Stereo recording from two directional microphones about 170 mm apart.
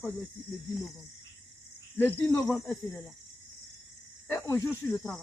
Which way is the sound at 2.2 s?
Centre (ahead or behind).